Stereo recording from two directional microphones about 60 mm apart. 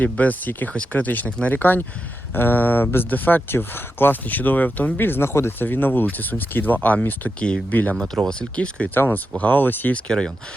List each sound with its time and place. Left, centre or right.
0.0 s speech: left
7.3 s speech: centre
7.7 s speech: left
7.9 s speech: centre
9.0 s speech: left
9.9 s speech: centre